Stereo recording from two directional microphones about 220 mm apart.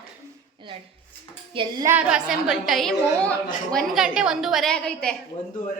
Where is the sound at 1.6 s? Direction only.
20° right (ahead or behind).